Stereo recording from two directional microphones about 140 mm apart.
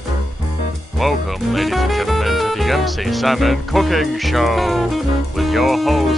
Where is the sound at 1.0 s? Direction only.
Centre (ahead or behind).